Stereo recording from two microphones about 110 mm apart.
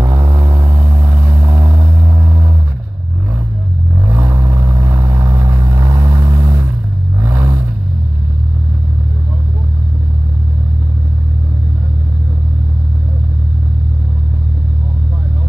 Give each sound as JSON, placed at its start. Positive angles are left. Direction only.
{"t": 0.0, "sound": "vehicle", "side_deg": -25}
{"t": 4.1, "sound": "vehicle", "side_deg": -25}